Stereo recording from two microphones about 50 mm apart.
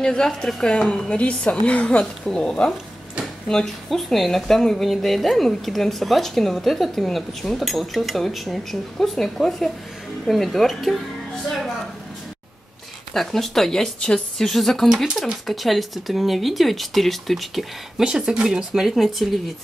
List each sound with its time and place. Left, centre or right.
0.0 s a woman's voice: centre
13.1 s speech: centre
13.9 s a woman's voice: centre
14.4 s speech: centre
18.0 s speech: centre